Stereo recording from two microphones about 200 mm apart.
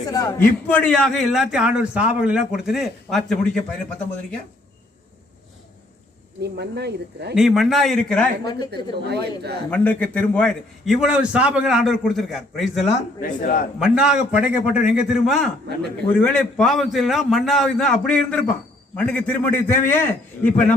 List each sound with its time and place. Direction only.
0.1 s a man's voice: 20° left (ahead or behind)
6.4 s speech: 55° right (ahead or behind)
7.3 s a man's voice: centre (ahead or behind)
8.4 s speech: 20° left (ahead or behind)
8.7 s speech: 55° right (ahead or behind)
9.6 s a man's voice: 5° left (ahead or behind)
12.8 s a man's voice: 45° left (ahead or behind)
13.7 s a man's voice: 5° right (ahead or behind)
16.0 s a man's voice: 5° left (ahead or behind)